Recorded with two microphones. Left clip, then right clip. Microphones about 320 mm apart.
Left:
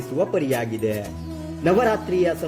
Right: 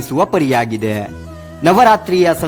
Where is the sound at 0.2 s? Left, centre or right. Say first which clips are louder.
Right 8 dB; right.